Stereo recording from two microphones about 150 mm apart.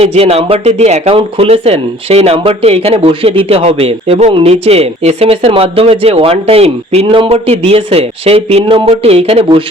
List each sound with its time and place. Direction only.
0.0 s speech: 40° right (ahead or behind)